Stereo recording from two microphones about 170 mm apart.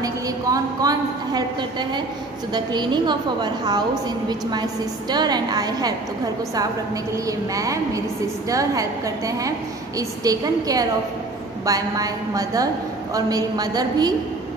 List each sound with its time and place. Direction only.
0.0 s a woman's voice: 20° right (ahead or behind)
7.2 s a woman's voice: 20° right (ahead or behind)